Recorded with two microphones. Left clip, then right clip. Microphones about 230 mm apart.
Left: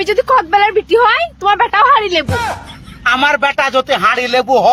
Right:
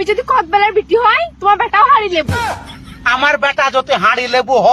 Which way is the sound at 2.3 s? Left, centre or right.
Centre.